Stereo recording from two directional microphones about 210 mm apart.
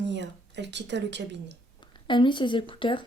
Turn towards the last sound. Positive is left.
turn(degrees=25)  # may be behind; listen again after turning